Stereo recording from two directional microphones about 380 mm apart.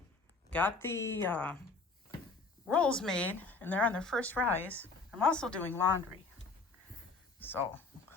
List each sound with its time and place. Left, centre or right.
0.5 s a woman's voice: centre
2.6 s a woman's voice: centre
7.3 s speech: centre